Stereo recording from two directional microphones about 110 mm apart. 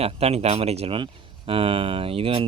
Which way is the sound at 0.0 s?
70° right (ahead or behind).